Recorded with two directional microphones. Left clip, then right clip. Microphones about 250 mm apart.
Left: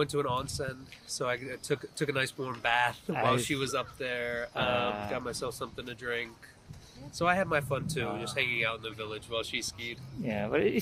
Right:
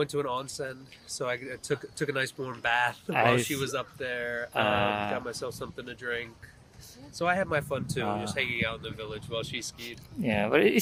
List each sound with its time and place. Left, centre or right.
0.0 s speech: centre
4.5 s mantra: right
5.1 s speech: centre
10.2 s mantra: right